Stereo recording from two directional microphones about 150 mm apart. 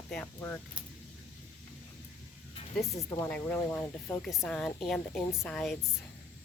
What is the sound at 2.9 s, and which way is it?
A woman's voice, 15° left (ahead or behind).